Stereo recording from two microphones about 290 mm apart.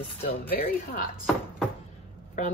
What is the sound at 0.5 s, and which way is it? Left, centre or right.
Speech, left.